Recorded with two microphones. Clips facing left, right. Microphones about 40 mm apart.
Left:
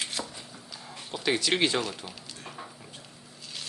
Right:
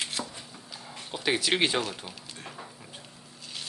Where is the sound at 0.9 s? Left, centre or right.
Centre.